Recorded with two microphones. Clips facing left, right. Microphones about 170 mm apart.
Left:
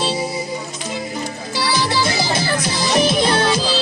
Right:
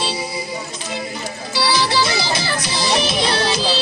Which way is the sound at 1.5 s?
45° left (ahead or behind).